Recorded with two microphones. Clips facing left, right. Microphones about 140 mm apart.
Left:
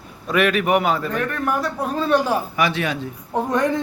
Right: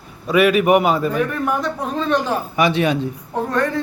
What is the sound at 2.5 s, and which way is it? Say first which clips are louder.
Speech: right 5 dB; 20° right (ahead or behind).